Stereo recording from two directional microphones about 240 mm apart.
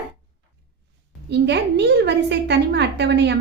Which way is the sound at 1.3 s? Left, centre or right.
Right.